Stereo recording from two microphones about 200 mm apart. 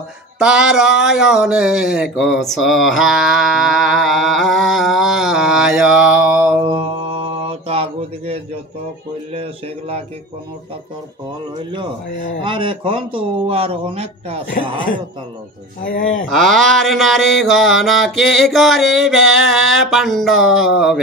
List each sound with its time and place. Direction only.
0.4 s speech: 5° right (ahead or behind)
6.6 s mantra: 30° right (ahead or behind)
9.3 s speech: 30° right (ahead or behind)
12.4 s speech: 25° right (ahead or behind)
16.3 s speech: centre (ahead or behind)